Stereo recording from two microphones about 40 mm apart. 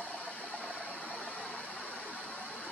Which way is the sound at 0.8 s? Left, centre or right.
Left.